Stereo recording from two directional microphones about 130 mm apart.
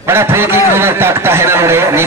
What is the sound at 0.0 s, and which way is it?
A man's voice, 20° right (ahead or behind).